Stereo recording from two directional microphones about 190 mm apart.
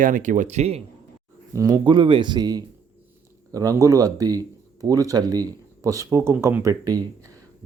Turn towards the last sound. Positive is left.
turn(degrees=-20)  # may be behind; listen again after turning